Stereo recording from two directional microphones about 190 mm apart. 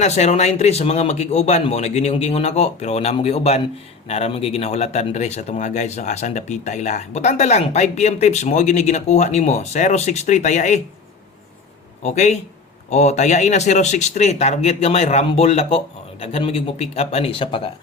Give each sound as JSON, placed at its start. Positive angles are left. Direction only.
{"t": 0.0, "sound": "speech", "side_deg": 35}
{"t": 12.0, "sound": "speech", "side_deg": 35}